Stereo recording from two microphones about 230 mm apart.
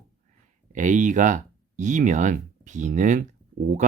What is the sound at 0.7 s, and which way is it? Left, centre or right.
Speech, right.